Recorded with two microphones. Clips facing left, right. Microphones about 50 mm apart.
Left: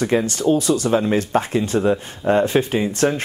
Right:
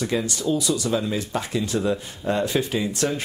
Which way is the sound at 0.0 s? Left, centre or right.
Left.